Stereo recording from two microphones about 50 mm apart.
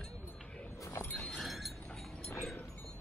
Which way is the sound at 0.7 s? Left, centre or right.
Left.